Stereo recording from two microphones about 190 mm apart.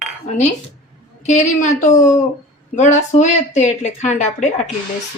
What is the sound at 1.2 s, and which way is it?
Speech, 40° left (ahead or behind).